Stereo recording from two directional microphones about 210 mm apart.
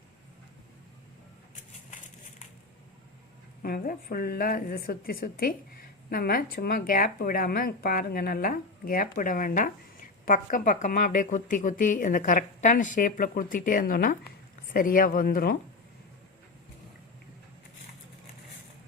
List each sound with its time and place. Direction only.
3.6 s a woman's voice: 45° left (ahead or behind)